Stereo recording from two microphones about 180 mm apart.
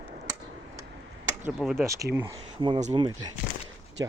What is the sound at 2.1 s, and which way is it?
Speech, 20° right (ahead or behind).